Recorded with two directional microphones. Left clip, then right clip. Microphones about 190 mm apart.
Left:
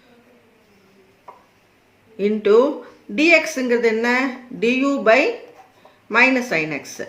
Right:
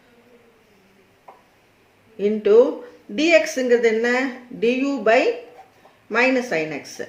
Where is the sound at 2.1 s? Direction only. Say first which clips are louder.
Even; 30° left (ahead or behind).